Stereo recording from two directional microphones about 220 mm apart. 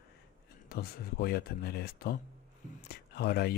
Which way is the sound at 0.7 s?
45° left (ahead or behind).